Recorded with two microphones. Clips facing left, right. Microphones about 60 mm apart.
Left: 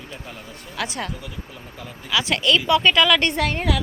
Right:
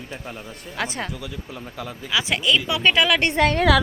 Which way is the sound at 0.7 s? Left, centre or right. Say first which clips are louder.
Even; right.